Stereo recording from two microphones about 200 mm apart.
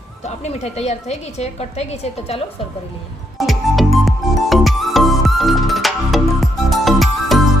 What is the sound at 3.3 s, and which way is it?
Music, centre (ahead or behind).